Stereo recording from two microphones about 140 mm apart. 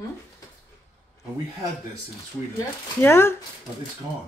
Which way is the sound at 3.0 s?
20° left (ahead or behind).